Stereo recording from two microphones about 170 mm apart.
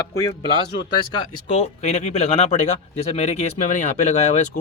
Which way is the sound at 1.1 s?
30° left (ahead or behind).